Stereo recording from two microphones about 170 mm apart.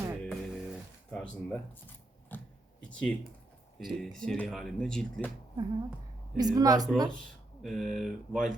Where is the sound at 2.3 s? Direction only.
10° left (ahead or behind).